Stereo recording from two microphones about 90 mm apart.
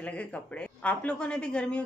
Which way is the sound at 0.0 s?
15° left (ahead or behind).